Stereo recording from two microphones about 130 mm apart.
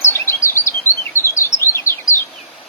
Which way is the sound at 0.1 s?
20° left (ahead or behind).